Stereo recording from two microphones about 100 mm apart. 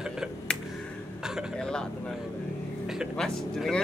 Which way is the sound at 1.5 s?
5° left (ahead or behind).